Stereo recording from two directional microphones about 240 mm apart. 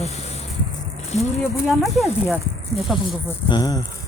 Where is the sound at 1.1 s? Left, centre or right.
Left.